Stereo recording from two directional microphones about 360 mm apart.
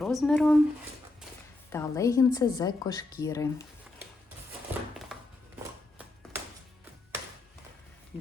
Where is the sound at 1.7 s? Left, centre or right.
Centre.